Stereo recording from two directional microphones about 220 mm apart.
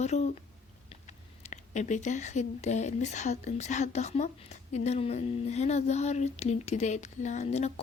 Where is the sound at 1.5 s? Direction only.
30° left (ahead or behind).